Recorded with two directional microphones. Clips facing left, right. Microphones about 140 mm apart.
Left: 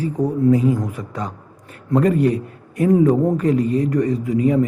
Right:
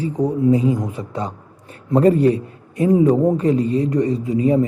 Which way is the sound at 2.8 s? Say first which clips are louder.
Even; 20° right (ahead or behind).